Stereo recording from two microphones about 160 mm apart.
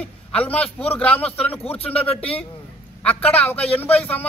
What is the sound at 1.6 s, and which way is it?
Speech, 40° left (ahead or behind).